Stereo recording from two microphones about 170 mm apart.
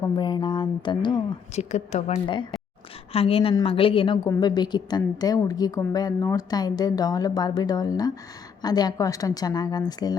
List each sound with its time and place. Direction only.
0.0 s a woman's voice: 25° left (ahead or behind)
1.5 s a woman's voice: 40° left (ahead or behind); by 10.2 s 25° left (ahead or behind)